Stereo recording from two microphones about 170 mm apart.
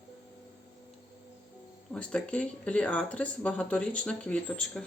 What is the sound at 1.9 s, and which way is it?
Speech, 5° left (ahead or behind).